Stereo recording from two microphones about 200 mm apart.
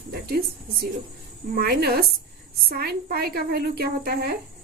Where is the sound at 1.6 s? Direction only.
50° right (ahead or behind).